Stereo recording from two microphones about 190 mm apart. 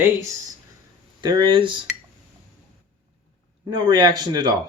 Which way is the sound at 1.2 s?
25° right (ahead or behind).